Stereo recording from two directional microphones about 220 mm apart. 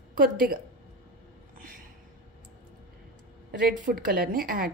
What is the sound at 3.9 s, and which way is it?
Speech, 45° right (ahead or behind).